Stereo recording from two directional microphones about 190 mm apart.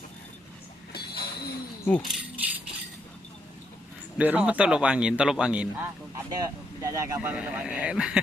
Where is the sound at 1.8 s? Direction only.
5° left (ahead or behind).